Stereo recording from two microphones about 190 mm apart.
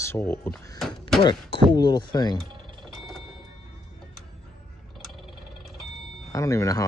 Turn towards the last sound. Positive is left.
turn(degrees=15)  # may be behind; listen again after turning